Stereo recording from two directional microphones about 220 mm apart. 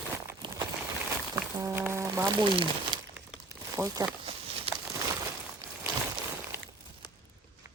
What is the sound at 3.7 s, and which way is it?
Speech, 15° right (ahead or behind).